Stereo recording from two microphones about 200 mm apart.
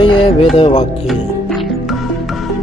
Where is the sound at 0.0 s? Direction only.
25° left (ahead or behind).